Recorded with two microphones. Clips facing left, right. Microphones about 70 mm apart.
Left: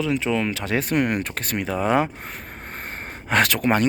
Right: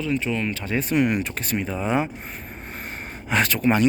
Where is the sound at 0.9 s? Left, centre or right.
Left.